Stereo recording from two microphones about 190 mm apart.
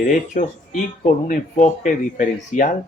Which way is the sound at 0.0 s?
45° left (ahead or behind).